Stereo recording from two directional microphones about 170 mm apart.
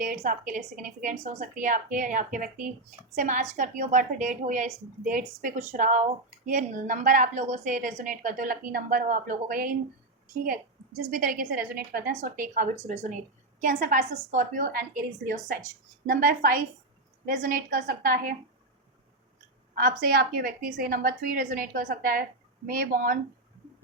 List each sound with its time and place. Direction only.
0.0 s a woman's voice: 50° right (ahead or behind)
11.0 s a woman's voice: 55° right (ahead or behind)
20.0 s a woman's voice: 60° right (ahead or behind)